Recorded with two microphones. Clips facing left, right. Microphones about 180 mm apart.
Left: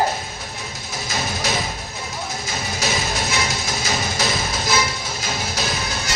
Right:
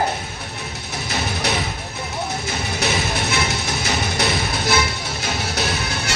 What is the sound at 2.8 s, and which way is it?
Music, 65° right (ahead or behind).